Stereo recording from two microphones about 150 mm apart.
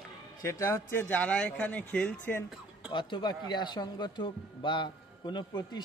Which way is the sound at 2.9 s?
30° left (ahead or behind).